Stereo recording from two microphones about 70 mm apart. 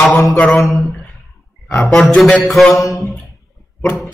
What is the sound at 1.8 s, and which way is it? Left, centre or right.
Music, centre.